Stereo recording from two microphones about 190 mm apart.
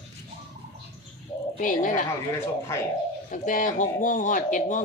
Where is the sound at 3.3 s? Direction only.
45° left (ahead or behind).